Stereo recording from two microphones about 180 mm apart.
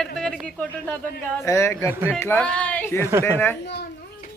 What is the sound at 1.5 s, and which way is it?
Speech, 15° left (ahead or behind).